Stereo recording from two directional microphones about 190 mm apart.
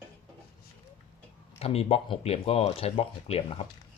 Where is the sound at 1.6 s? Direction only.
30° left (ahead or behind).